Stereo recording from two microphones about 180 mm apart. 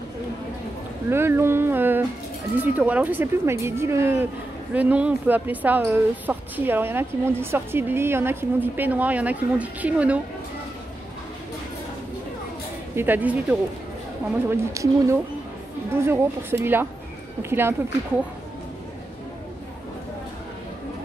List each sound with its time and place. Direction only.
1.1 s speech: 15° right (ahead or behind)
12.9 s speech: 10° right (ahead or behind)